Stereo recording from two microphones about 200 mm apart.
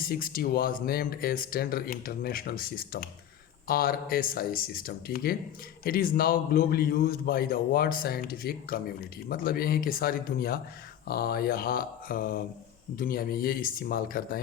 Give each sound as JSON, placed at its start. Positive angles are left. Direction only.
{"t": 0.0, "sound": "a man's voice", "side_deg": 45}